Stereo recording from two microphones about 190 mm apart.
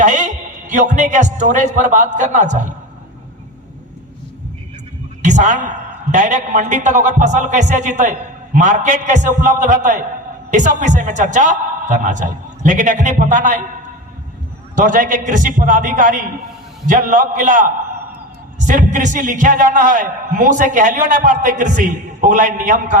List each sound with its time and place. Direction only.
0.0 s a man's voice: 40° right (ahead or behind)
5.2 s a woman's voice: 40° right (ahead or behind)
14.8 s a man's voice: 45° right (ahead or behind)